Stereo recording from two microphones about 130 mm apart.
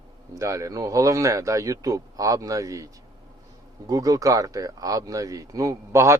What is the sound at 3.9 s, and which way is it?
Speech, 25° right (ahead or behind).